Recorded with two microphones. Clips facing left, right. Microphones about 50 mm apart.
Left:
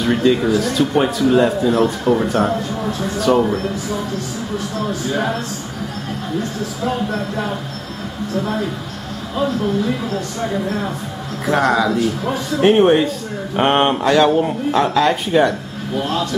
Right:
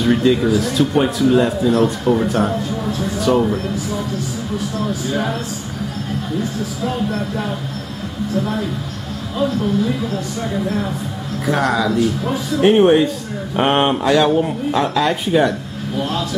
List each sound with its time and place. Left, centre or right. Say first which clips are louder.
0.0 s speech: right 1 dB; centre
6.8 s speech: left 1 dB; centre
9.4 s speech: right 1 dB; centre